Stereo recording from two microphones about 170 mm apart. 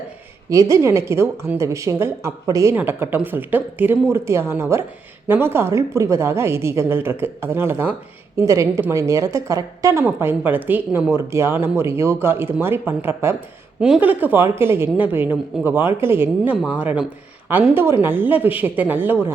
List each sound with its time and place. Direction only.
0.5 s a woman's voice: 20° right (ahead or behind)